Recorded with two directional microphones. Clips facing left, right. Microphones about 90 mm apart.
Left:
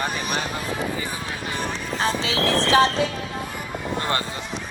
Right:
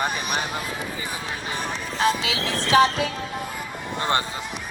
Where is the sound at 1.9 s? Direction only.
35° left (ahead or behind).